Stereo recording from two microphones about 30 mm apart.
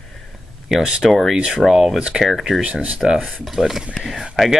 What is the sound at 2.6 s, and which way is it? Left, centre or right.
Speech, right.